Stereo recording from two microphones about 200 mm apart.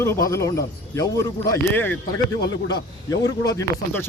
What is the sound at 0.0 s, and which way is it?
Speech, 15° left (ahead or behind).